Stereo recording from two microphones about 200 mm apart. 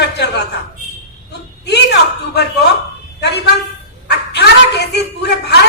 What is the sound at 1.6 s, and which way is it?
A man's voice, 55° left (ahead or behind).